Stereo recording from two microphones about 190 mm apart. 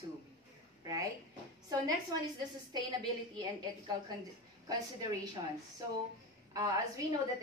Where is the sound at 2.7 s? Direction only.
20° right (ahead or behind).